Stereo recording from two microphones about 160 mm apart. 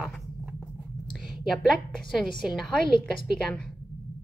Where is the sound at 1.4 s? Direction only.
Centre (ahead or behind).